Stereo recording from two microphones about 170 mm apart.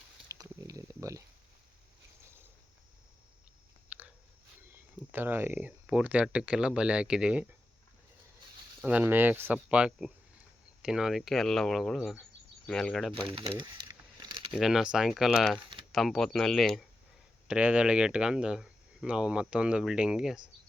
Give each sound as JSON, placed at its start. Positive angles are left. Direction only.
{"t": 0.3, "sound": "a sound", "side_deg": -20}
{"t": 3.8, "sound": "biting", "side_deg": -10}
{"t": 5.1, "sound": "speech", "side_deg": -10}
{"t": 8.8, "sound": "speech", "side_deg": -10}
{"t": 13.1, "sound": "speech", "side_deg": -30}
{"t": 13.6, "sound": "a sound", "side_deg": -25}
{"t": 14.5, "sound": "speech", "side_deg": 0}